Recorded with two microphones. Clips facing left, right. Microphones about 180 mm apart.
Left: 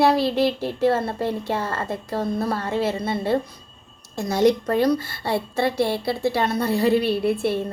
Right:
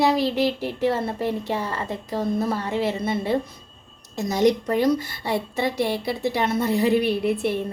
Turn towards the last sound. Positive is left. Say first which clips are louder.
# left 1 dB
turn(degrees=-20)  # may be behind; listen again after turning